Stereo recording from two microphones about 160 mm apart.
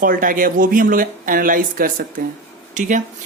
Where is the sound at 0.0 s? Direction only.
60° right (ahead or behind).